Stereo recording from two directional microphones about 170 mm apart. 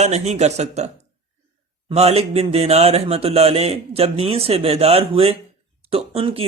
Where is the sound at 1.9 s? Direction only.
40° right (ahead or behind).